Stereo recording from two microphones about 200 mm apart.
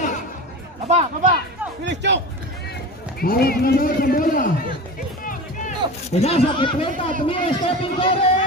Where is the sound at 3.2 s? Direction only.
50° left (ahead or behind).